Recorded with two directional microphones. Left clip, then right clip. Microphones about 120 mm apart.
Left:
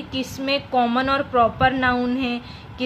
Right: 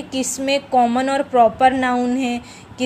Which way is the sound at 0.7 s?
20° right (ahead or behind).